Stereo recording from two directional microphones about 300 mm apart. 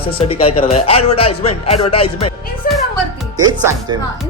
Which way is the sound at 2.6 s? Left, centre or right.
Left.